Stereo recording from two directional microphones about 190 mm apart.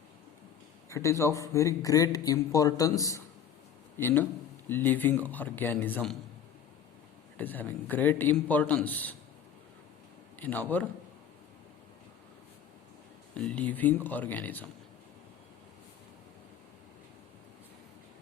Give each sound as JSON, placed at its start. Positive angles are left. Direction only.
{"t": 0.9, "sound": "a man's voice", "side_deg": 15}
{"t": 7.3, "sound": "speech", "side_deg": 10}
{"t": 10.4, "sound": "speech", "side_deg": 10}
{"t": 13.3, "sound": "speech", "side_deg": 5}